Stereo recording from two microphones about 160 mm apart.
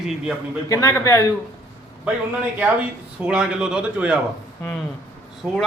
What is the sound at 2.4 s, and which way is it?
Speech, 10° right (ahead or behind).